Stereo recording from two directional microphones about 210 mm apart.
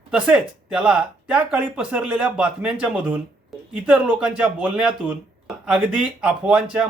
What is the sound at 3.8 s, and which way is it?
Speech, 5° right (ahead or behind).